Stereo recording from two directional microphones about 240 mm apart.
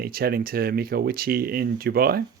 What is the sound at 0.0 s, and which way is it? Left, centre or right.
Speech, right.